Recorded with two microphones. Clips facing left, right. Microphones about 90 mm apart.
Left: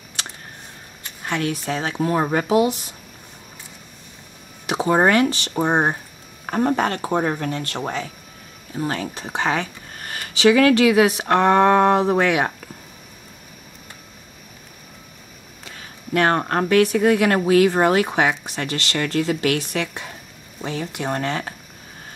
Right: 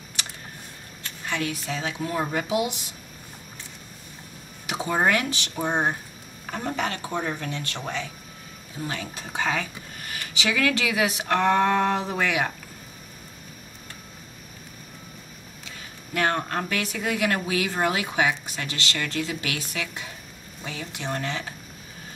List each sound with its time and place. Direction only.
1.2 s speech: 55° left (ahead or behind)
1.8 s speech: 40° left (ahead or behind)
4.7 s speech: 40° left (ahead or behind)
9.3 s speech: 60° left (ahead or behind); by 12.5 s 40° left (ahead or behind)
15.6 s a sound: 50° left (ahead or behind)
16.3 s speech: 45° left (ahead or behind)
20.6 s speech: 45° left (ahead or behind)